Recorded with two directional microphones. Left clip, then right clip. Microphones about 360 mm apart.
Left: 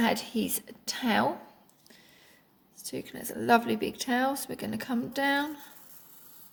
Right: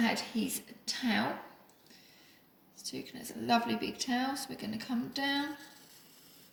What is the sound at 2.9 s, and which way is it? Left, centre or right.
Speech, left.